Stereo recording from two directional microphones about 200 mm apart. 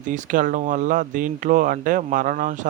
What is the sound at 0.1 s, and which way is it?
A man's voice, 40° right (ahead or behind).